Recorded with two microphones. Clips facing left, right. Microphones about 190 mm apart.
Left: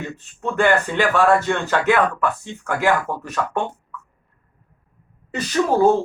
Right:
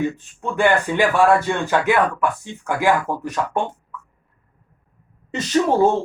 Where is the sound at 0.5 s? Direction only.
15° right (ahead or behind).